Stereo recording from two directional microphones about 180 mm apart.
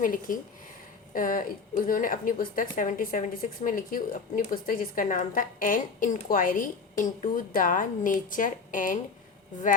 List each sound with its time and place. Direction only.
0.0 s a woman's voice: 50° left (ahead or behind)